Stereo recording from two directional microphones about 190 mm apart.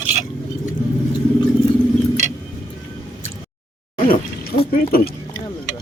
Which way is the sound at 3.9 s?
45° left (ahead or behind).